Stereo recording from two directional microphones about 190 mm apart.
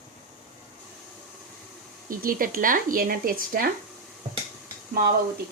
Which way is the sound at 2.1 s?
50° right (ahead or behind).